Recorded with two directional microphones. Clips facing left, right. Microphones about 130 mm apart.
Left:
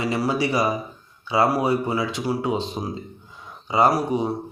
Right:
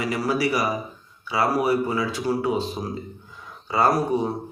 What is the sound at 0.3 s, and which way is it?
Speech, 25° left (ahead or behind).